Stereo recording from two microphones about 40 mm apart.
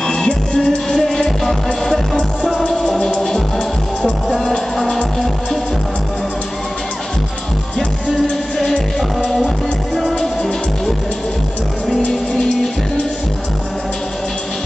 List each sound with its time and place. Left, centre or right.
0.0 s music: left
2.6 s music: centre
8.7 s music: centre